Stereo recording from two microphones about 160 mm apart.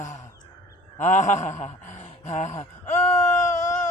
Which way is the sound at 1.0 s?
50° left (ahead or behind).